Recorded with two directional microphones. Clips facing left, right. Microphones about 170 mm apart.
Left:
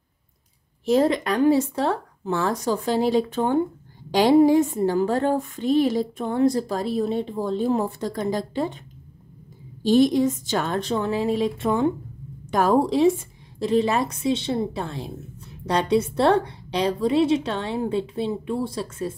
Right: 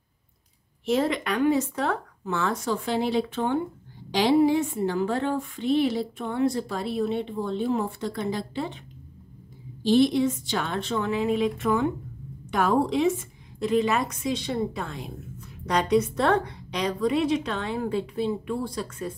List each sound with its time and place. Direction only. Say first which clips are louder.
0.8 s speech: left 5 dB; 40° left (ahead or behind)
9.8 s a woman's voice: left 3 dB; 45° left (ahead or behind); by 19.1 s 25° left (ahead or behind)